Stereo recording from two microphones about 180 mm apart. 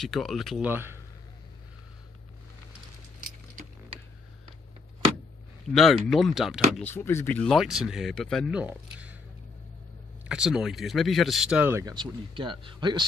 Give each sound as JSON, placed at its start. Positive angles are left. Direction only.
{"t": 0.0, "sound": "speech", "side_deg": 0}
{"t": 0.7, "sound": "a man's voice", "side_deg": -10}
{"t": 5.7, "sound": "speech", "side_deg": 0}
{"t": 6.7, "sound": "speech", "side_deg": 10}
{"t": 7.4, "sound": "speech", "side_deg": 0}
{"t": 10.2, "sound": "speech", "side_deg": -5}
{"t": 11.8, "sound": "speech", "side_deg": -25}